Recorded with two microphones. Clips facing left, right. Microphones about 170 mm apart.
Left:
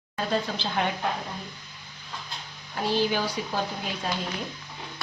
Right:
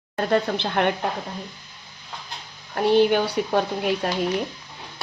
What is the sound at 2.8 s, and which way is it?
Speech, 60° right (ahead or behind).